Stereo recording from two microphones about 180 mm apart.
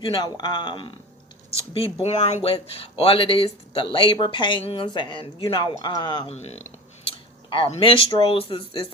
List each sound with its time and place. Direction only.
0.0 s speech: 25° left (ahead or behind)
6.3 s speech: 35° left (ahead or behind)